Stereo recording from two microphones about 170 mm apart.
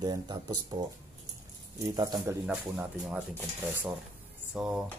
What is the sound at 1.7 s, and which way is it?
Speech, 20° right (ahead or behind).